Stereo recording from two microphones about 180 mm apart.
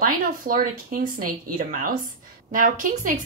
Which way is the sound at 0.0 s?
50° right (ahead or behind).